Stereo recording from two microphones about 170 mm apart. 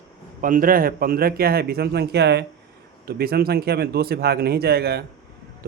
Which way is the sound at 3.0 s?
65° right (ahead or behind).